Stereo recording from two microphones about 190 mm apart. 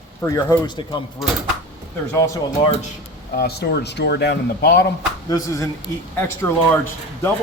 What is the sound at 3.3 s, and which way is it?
Speech, 60° left (ahead or behind).